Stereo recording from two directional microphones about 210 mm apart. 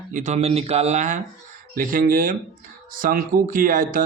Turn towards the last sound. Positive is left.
turn(degrees=-40)  # may be behind; listen again after turning